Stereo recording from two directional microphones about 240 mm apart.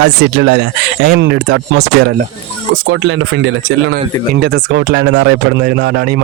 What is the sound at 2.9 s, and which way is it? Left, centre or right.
Speech, right.